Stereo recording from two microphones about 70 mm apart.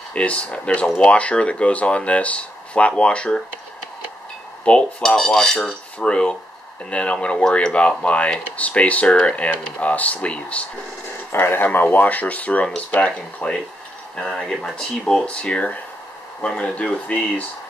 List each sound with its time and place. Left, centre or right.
0.1 s speech: centre
4.7 s speech: centre
5.0 s speech: centre
11.3 s speech: left